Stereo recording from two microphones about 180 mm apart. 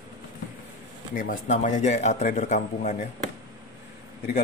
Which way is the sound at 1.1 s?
45° left (ahead or behind).